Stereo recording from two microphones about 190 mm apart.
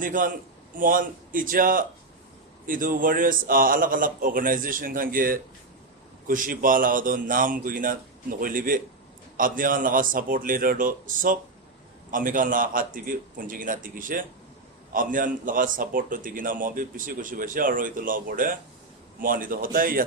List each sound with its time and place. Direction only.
0.0 s a man's voice: 45° right (ahead or behind)